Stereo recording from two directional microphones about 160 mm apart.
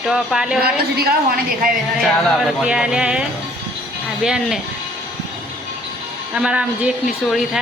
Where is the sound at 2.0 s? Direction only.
Centre (ahead or behind).